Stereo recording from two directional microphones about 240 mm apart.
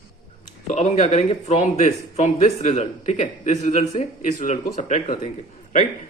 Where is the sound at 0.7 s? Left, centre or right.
Left.